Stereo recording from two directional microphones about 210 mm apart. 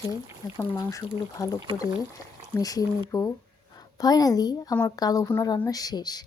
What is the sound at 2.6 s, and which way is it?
A woman's voice, 15° left (ahead or behind).